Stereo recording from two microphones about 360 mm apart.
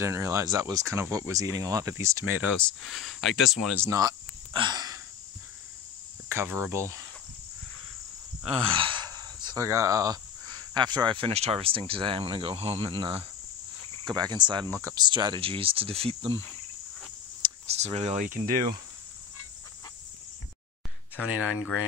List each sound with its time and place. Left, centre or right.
0.0 s speech: centre
4.6 s a sound: centre
6.2 s speech: centre
8.5 s speech: centre
17.4 s speech: centre